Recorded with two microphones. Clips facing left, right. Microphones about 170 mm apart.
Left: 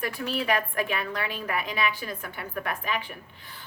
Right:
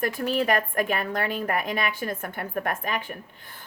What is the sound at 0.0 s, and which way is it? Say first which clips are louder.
A woman's voice: right 5 dB; 45° right (ahead or behind).